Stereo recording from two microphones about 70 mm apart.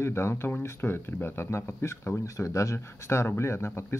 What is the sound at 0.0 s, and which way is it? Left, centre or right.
Speech, left.